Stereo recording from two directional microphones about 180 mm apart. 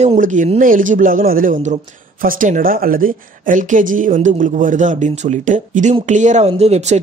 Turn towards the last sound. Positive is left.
turn(degrees=-35)  # may be behind; listen again after turning